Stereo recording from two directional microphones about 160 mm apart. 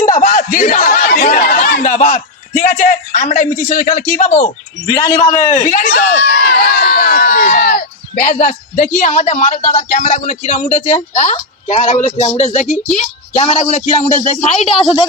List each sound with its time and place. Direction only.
0.1 s a sound: 55° left (ahead or behind)
1.3 s a man's voice: 65° left (ahead or behind)
4.9 s a man's voice: 20° left (ahead or behind)
5.6 s a woman's voice: 55° left (ahead or behind)
14.8 s a woman's voice: 30° left (ahead or behind)